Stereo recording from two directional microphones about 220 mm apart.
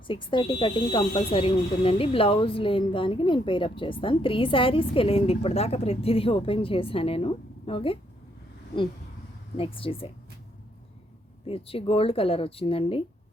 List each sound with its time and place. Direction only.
0.1 s speech: 20° left (ahead or behind)
9.6 s speech: 25° left (ahead or behind)
11.4 s speech: 25° left (ahead or behind)